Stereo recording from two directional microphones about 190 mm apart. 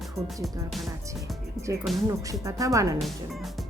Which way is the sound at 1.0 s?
15° right (ahead or behind).